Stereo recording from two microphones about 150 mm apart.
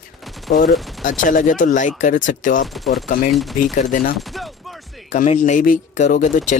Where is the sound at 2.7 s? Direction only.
Centre (ahead or behind).